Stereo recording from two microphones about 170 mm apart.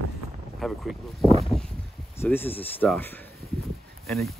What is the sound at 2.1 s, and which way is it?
Speech, 10° left (ahead or behind).